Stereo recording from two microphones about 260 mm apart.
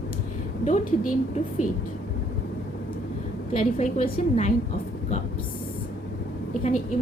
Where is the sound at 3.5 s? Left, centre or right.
Left.